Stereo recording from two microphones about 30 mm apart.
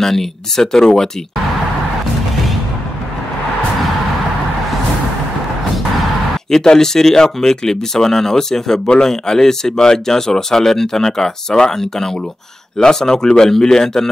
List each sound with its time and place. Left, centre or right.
0.0 s speech: centre
6.5 s speech: centre